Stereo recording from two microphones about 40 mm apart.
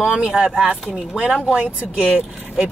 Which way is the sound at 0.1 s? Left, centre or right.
Right.